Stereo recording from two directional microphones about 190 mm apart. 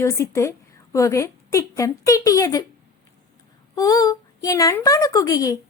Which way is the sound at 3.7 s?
20° left (ahead or behind).